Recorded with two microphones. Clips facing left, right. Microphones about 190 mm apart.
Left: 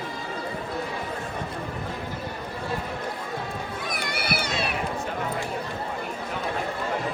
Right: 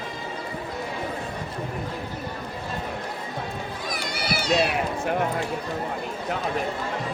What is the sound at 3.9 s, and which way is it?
Run, 60° left (ahead or behind).